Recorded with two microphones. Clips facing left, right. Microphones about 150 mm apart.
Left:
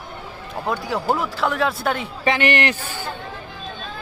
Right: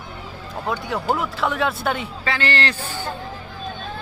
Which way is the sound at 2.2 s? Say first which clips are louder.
Left 5 dB; 15° left (ahead or behind).